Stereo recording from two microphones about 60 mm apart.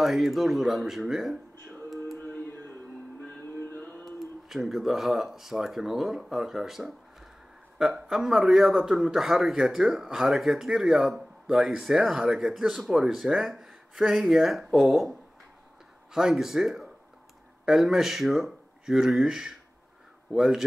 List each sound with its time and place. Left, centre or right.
0.0 s speech: centre
3.3 s music: left
4.5 s a man's voice: centre
16.1 s a man's voice: centre